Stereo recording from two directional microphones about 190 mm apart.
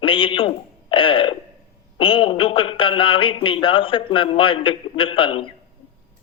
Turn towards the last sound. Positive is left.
turn(degrees=25)  # may be behind; listen again after turning